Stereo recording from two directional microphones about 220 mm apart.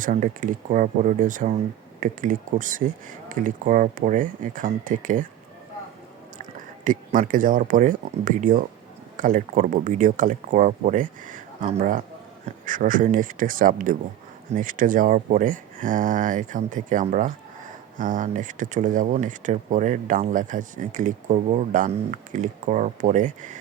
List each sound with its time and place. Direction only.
0.0 s speech: 35° right (ahead or behind)
6.8 s speech: 35° right (ahead or behind)